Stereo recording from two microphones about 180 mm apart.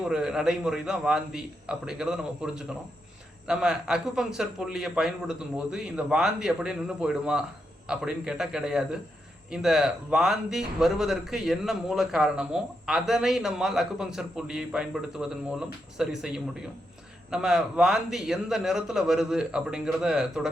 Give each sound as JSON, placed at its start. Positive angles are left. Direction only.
{"t": 0.0, "sound": "speech", "side_deg": -5}